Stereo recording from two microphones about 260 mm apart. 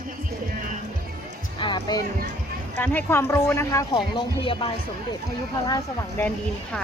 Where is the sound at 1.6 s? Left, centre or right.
Centre.